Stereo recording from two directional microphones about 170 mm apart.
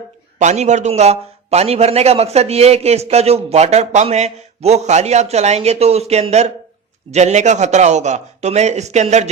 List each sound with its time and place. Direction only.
0.3 s a man's voice: 45° right (ahead or behind)